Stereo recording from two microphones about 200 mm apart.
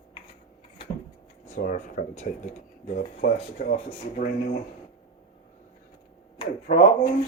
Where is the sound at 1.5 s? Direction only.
40° left (ahead or behind).